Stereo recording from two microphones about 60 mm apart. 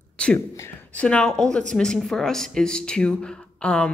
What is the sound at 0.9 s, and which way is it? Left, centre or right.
Speech, centre.